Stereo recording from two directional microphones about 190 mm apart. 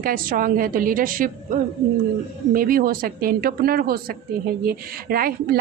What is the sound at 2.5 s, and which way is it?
Speech, 50° right (ahead or behind).